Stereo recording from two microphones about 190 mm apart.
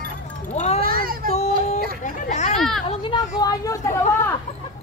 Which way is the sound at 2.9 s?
25° left (ahead or behind).